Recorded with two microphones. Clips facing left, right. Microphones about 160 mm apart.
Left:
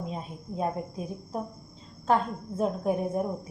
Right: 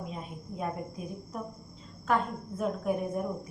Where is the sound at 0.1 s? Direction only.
30° left (ahead or behind).